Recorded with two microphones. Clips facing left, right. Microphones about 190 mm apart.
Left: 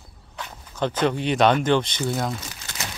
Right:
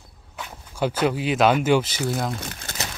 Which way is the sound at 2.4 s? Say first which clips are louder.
Right 4 dB; 55° right (ahead or behind).